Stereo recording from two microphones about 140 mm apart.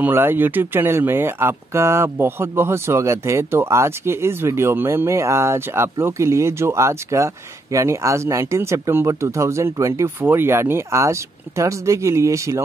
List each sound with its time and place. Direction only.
0.0 s speech: 15° right (ahead or behind)